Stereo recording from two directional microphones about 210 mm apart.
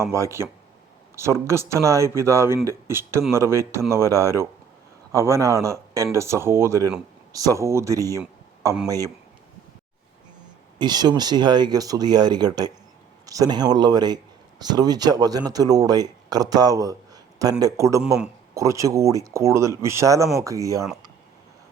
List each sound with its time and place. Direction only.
0.0 s speech: 15° right (ahead or behind)
10.8 s speech: 20° right (ahead or behind)